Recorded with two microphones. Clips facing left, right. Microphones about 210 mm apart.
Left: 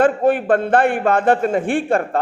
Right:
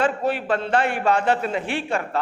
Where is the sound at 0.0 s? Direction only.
50° left (ahead or behind).